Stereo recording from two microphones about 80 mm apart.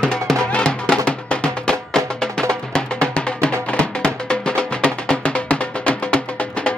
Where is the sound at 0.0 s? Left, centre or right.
Centre.